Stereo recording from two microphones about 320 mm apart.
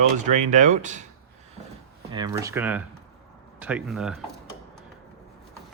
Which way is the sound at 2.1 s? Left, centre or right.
Centre.